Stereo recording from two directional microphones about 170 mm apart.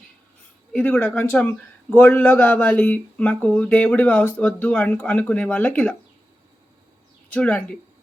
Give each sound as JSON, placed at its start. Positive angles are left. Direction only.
{"t": 0.7, "sound": "speech", "side_deg": 10}
{"t": 7.3, "sound": "speech", "side_deg": 5}